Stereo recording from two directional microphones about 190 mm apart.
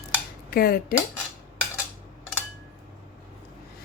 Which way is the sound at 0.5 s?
50° left (ahead or behind).